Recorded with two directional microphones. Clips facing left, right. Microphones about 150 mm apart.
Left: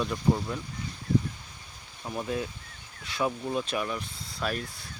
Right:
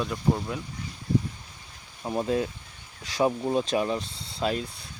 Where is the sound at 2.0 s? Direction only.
30° right (ahead or behind).